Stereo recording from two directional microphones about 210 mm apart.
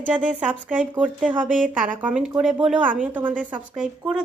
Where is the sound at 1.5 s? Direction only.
35° right (ahead or behind).